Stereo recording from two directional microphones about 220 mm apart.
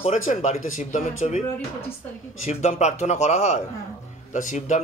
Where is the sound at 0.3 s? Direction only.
35° left (ahead or behind).